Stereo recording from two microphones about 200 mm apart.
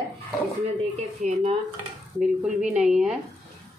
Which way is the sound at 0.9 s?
35° right (ahead or behind).